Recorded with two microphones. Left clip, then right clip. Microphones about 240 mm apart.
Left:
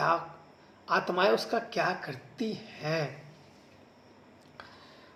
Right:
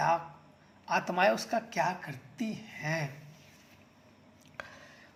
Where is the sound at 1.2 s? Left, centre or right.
Right.